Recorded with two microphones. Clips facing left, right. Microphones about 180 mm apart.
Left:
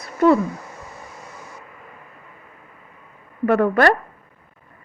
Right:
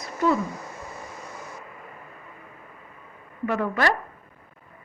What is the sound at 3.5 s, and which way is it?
Speech, 55° left (ahead or behind).